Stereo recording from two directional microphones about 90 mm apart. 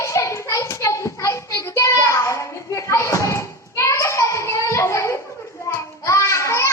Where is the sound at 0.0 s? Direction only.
35° left (ahead or behind).